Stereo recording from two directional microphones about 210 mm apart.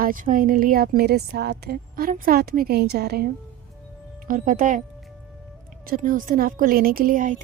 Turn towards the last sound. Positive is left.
turn(degrees=-40)  # may be behind; listen again after turning